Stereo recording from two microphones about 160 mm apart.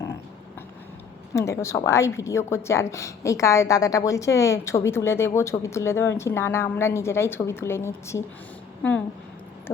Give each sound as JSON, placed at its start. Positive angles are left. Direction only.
{"t": 1.3, "sound": "a woman's voice", "side_deg": 20}